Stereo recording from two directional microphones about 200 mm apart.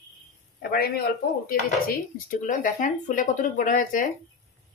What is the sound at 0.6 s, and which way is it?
Speech, 50° left (ahead or behind).